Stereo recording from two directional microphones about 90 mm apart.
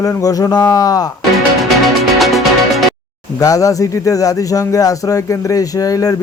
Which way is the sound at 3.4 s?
40° left (ahead or behind).